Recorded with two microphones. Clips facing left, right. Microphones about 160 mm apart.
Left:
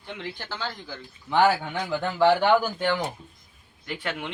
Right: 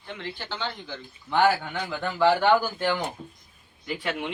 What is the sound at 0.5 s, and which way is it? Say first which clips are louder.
Speech: right 2 dB; 5° left (ahead or behind).